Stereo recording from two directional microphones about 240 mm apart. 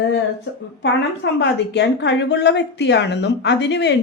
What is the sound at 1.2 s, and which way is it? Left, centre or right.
A woman's voice, left.